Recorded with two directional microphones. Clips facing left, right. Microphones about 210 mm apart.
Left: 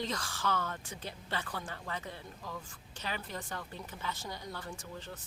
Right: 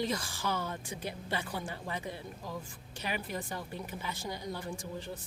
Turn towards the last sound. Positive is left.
turn(degrees=-15)  # may be behind; listen again after turning